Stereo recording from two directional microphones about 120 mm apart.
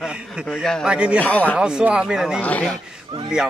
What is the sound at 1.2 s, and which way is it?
Speech, 15° left (ahead or behind).